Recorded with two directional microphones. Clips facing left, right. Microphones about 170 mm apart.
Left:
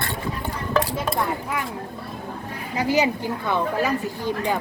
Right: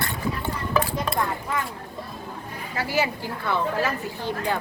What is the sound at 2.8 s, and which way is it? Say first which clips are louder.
Speech: left 5 dB; 20° left (ahead or behind).